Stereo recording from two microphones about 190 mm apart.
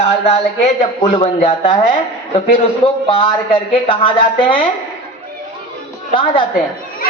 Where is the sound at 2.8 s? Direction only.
30° left (ahead or behind).